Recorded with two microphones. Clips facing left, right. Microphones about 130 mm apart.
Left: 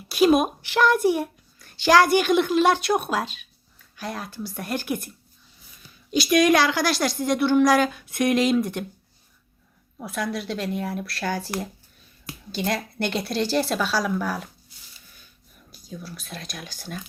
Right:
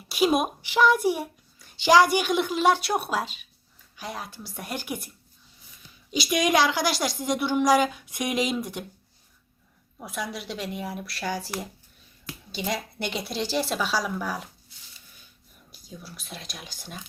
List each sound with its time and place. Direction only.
0.1 s a child's voice: 10° right (ahead or behind)
6.3 s a child's voice: 20° right (ahead or behind)
10.0 s a child's voice: 10° right (ahead or behind)
12.6 s a child's voice: 15° right (ahead or behind)
16.0 s a child's voice: 15° right (ahead or behind)